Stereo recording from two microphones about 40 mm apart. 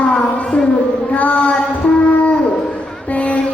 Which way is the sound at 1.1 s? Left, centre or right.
Left.